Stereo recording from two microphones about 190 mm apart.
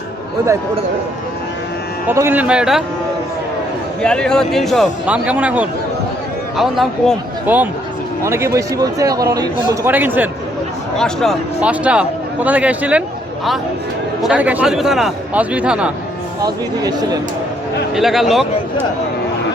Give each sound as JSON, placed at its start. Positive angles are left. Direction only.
{"t": 2.0, "sound": "speech", "side_deg": -10}
{"t": 4.0, "sound": "a man's voice", "side_deg": 5}
{"t": 10.9, "sound": "speech", "side_deg": 0}
{"t": 14.2, "sound": "a man's voice", "side_deg": -5}
{"t": 16.4, "sound": "speech", "side_deg": -20}
{"t": 17.9, "sound": "a man's voice", "side_deg": 0}